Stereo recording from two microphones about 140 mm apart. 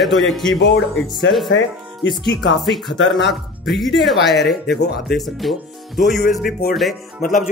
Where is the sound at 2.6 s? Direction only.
Centre (ahead or behind).